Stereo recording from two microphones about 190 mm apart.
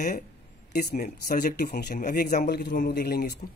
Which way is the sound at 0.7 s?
50° left (ahead or behind).